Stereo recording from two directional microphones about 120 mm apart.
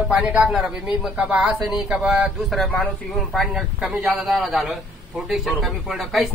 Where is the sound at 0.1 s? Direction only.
5° right (ahead or behind).